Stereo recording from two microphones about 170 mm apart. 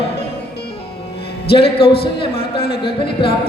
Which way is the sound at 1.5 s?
35° left (ahead or behind).